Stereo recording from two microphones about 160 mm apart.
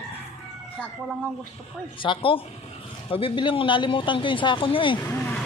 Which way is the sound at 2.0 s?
35° left (ahead or behind).